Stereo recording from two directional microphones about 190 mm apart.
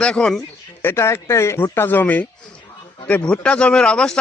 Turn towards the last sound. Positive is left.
turn(degrees=5)  # may be behind; listen again after turning